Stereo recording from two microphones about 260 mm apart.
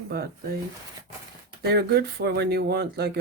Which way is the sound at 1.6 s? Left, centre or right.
Right.